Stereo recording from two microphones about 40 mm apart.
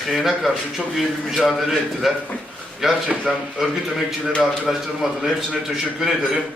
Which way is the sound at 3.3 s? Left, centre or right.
Centre.